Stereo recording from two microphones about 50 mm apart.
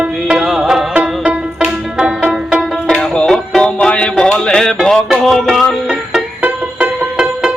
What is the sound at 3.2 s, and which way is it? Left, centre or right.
Music, centre.